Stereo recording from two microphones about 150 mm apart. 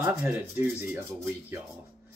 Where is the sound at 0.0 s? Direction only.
15° right (ahead or behind).